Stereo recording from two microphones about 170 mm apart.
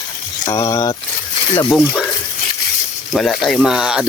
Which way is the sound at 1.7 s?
5° left (ahead or behind).